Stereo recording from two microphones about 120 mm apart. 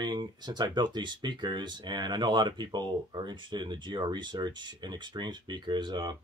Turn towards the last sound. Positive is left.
turn(degrees=-40)  # may be behind; listen again after turning